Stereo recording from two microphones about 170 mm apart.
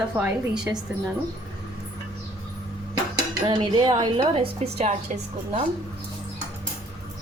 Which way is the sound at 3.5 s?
25° right (ahead or behind).